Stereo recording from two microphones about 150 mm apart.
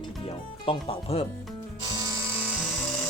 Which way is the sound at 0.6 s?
35° left (ahead or behind).